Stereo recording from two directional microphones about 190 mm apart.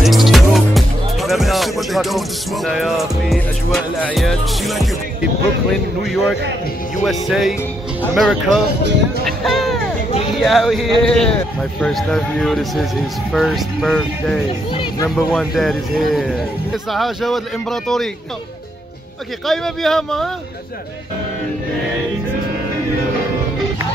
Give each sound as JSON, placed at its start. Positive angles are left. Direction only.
{"t": 0.0, "sound": "a man's voice", "side_deg": 0}
{"t": 9.2, "sound": "music", "side_deg": 0}
{"t": 10.3, "sound": "a man's voice", "side_deg": 0}
{"t": 14.7, "sound": "a sound", "side_deg": 25}
{"t": 15.0, "sound": "a man's voice", "side_deg": 0}
{"t": 19.4, "sound": "a man's voice", "side_deg": 0}